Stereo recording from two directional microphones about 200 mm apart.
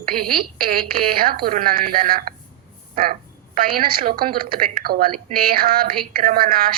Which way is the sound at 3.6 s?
45° right (ahead or behind).